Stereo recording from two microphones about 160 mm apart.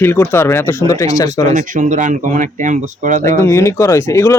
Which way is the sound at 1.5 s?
55° right (ahead or behind).